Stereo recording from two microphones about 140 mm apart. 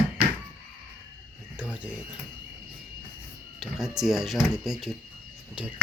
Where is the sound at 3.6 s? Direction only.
5° right (ahead or behind).